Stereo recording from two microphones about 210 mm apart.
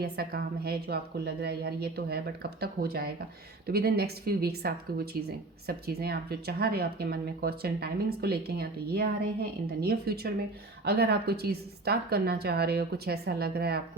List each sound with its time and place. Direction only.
0.0 s speech: 50° right (ahead or behind)